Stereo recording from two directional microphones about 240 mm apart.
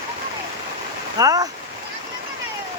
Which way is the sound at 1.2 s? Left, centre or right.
Centre.